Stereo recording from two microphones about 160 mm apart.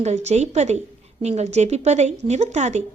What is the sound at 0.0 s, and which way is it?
A woman's voice, 45° right (ahead or behind).